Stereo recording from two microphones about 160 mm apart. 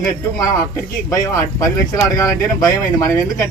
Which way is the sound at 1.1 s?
20° left (ahead or behind).